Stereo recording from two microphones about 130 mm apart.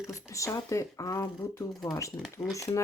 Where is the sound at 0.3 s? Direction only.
25° left (ahead or behind).